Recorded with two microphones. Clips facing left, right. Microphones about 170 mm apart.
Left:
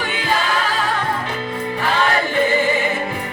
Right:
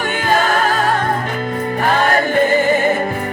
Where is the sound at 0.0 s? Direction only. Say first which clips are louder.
Right 5 dB; 50° right (ahead or behind).